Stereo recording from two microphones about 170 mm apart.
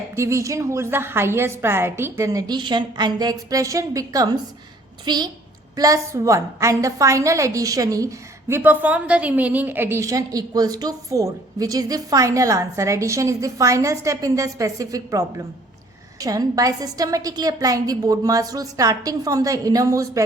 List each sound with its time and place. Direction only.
0.2 s a woman's voice: 15° right (ahead or behind)
16.2 s a woman's voice: 20° right (ahead or behind)